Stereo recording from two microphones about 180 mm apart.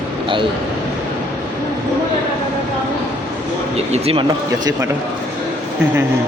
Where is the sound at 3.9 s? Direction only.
35° right (ahead or behind).